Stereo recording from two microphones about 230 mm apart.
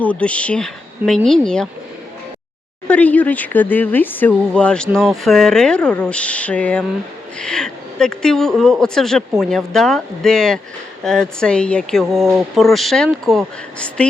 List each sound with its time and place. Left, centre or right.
0.0 s speech: centre
2.8 s speech: centre